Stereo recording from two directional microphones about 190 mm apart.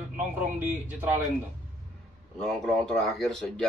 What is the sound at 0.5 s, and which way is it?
Speech, 10° right (ahead or behind).